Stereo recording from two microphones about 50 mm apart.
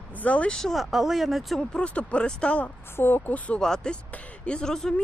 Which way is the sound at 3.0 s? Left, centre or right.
Left.